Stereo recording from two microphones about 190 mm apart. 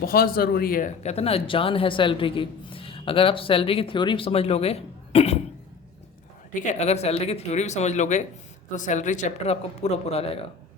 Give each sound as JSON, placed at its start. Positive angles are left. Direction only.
{"t": 0.0, "sound": "speech", "side_deg": 50}
{"t": 6.5, "sound": "speech", "side_deg": 35}